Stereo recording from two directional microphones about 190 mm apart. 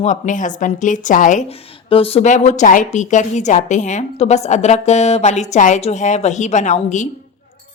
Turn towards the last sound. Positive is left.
turn(degrees=40)  # may be behind; listen again after turning